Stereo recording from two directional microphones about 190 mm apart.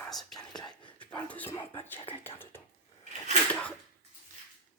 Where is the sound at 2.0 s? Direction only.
30° left (ahead or behind).